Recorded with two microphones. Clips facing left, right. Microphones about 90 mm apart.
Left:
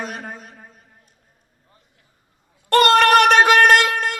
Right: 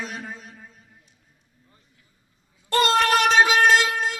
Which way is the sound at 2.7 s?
65° left (ahead or behind).